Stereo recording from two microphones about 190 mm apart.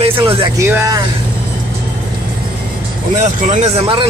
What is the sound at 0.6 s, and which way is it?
Speech, 15° right (ahead or behind).